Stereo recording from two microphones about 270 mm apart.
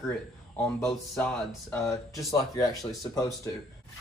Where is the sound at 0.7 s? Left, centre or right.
Centre.